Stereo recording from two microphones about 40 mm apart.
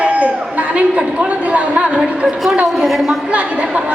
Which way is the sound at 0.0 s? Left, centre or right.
Right.